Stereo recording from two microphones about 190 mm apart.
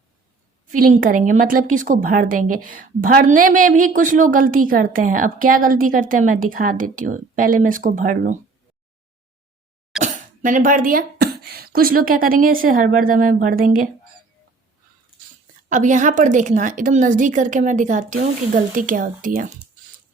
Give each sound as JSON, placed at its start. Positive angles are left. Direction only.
{"t": 0.7, "sound": "a woman's voice", "side_deg": -50}
{"t": 10.0, "sound": "speech", "side_deg": -45}
{"t": 15.7, "sound": "a woman's voice", "side_deg": -40}